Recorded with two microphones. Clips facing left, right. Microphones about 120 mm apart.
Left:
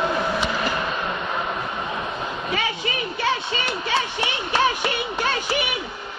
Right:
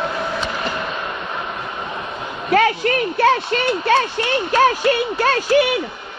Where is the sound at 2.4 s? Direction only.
75° right (ahead or behind).